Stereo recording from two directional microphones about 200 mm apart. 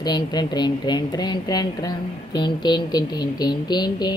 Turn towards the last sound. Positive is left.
turn(degrees=20)  # may be behind; listen again after turning